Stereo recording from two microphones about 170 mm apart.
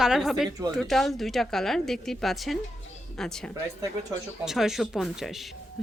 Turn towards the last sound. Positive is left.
turn(degrees=0)  # may be behind; listen again after turning